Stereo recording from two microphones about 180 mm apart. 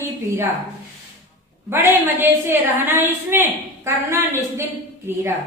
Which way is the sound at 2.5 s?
10° right (ahead or behind).